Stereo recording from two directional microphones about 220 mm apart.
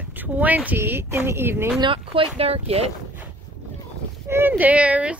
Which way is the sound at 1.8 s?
25° right (ahead or behind).